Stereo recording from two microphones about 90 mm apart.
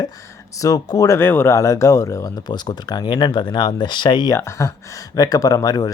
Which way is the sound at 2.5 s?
55° left (ahead or behind).